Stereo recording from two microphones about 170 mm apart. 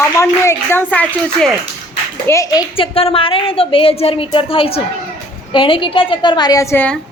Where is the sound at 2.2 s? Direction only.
20° left (ahead or behind).